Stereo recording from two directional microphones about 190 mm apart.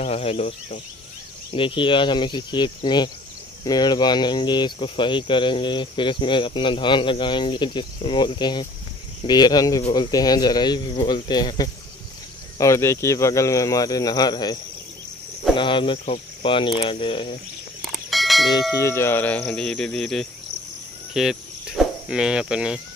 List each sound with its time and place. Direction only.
0.0 s speech: 30° left (ahead or behind)
17.8 s church bell: centre (ahead or behind)
18.5 s speech: 15° left (ahead or behind); by 22.8 s 5° right (ahead or behind)